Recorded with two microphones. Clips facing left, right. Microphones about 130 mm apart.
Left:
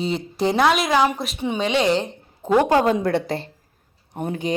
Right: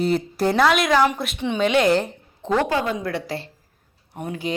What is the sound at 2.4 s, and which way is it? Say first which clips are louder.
Speech: left 4 dB; 15° left (ahead or behind).